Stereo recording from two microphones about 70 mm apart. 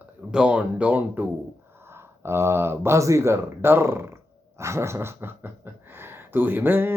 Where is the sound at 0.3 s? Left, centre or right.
Centre.